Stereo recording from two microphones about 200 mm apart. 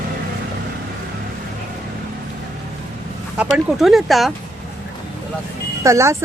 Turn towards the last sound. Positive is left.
turn(degrees=-15)  # may be behind; listen again after turning